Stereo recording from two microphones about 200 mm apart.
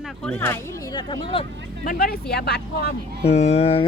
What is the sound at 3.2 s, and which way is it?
Speech, 30° left (ahead or behind).